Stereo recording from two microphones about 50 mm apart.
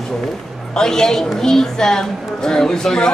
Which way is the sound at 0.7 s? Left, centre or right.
Centre.